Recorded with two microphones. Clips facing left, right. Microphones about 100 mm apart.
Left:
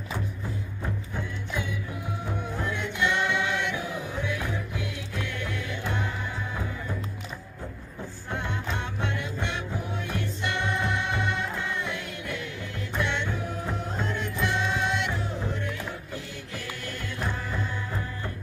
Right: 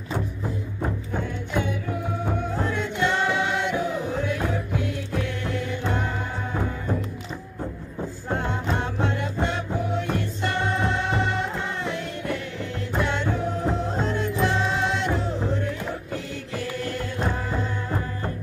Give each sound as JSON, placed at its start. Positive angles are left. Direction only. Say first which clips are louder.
{"t": 1.1, "sound": "music", "louder": "right 7 dB", "side_deg": -50}
{"t": 2.7, "sound": "music", "louder": "right 2 dB", "side_deg": -40}
{"t": 8.3, "sound": "music", "louder": "right 6 dB", "side_deg": -35}